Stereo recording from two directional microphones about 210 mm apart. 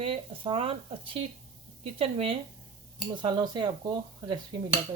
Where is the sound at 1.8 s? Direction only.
25° right (ahead or behind).